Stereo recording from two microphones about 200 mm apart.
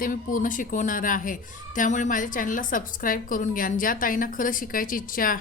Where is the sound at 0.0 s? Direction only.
45° left (ahead or behind).